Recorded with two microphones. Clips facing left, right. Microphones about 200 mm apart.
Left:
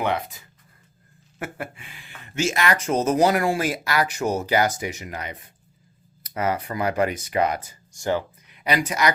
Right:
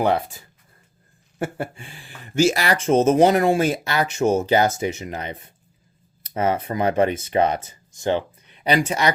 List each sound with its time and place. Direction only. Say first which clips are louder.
0.0 s speech: right 5 dB; 35° right (ahead or behind)